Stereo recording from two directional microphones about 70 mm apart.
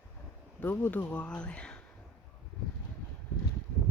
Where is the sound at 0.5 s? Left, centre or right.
Left.